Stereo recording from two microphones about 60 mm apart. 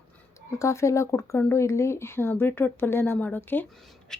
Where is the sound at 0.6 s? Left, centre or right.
Left.